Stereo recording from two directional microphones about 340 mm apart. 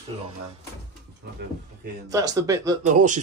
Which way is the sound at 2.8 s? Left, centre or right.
Right.